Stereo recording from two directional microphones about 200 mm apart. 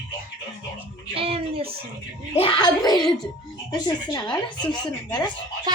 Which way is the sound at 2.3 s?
25° left (ahead or behind).